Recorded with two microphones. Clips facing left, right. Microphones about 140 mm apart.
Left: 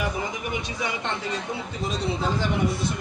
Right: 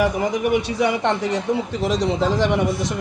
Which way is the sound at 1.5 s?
90° right.